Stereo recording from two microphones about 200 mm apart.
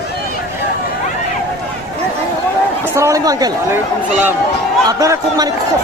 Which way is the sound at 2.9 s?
15° right (ahead or behind).